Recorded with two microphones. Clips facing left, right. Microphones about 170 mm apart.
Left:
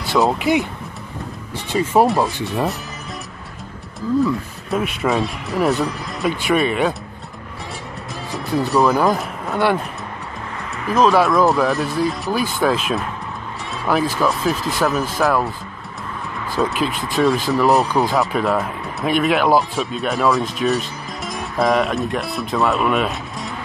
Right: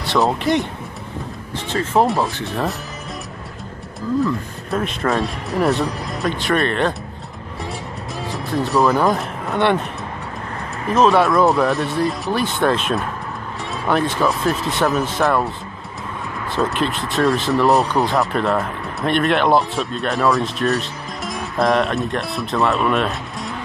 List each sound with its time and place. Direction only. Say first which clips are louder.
0.0 s speech: left 1 dB; centre (ahead or behind)
1.7 s speech: left 2 dB; 10° left (ahead or behind)
2.0 s speech: left 2 dB; centre (ahead or behind)
4.2 s speech: left 1 dB; 5° left (ahead or behind)
8.3 s speech: left 1 dB; centre (ahead or behind)
10.9 s speech: even; centre (ahead or behind)
16.5 s speech: even; centre (ahead or behind)